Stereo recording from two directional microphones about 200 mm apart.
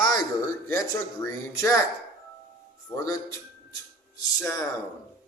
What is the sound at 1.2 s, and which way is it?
Speech, 15° left (ahead or behind).